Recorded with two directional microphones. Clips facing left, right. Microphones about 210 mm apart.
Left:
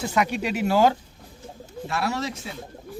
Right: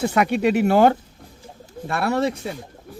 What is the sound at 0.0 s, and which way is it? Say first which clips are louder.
Speech: right 6 dB; 60° right (ahead or behind).